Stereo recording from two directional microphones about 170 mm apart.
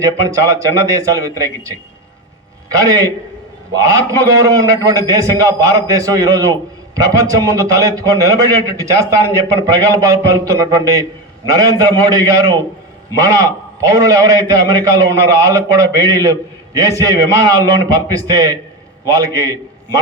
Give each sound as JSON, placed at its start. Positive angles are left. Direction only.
{"t": 0.0, "sound": "a man's voice", "side_deg": -20}
{"t": 2.8, "sound": "a man's voice", "side_deg": -20}